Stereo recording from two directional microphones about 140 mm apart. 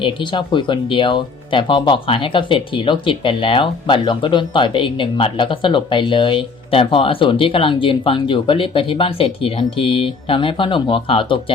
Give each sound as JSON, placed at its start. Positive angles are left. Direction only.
{"t": 0.0, "sound": "speech", "side_deg": 35}